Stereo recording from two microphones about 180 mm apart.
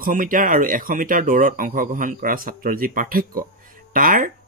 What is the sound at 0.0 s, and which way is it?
A man's voice, 50° right (ahead or behind).